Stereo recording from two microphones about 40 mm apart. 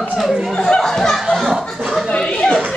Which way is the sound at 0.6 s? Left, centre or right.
Left.